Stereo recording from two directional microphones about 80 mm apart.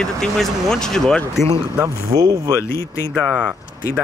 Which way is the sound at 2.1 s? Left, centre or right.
Right.